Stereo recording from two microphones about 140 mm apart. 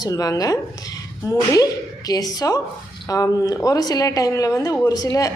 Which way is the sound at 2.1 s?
25° left (ahead or behind).